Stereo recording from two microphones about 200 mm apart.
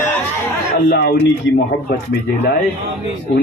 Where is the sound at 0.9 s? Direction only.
60° left (ahead or behind).